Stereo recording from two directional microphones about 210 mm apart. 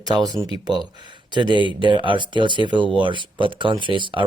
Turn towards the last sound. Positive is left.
turn(degrees=-25)  # may be behind; listen again after turning